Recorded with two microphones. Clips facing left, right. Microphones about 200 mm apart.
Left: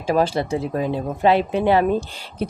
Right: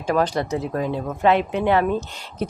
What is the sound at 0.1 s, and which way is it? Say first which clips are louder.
Speech: left 2 dB; 25° left (ahead or behind).